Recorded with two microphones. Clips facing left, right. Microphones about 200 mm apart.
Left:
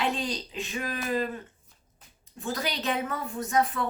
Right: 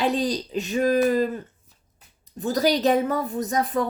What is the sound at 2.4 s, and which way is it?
A woman's voice, 40° right (ahead or behind).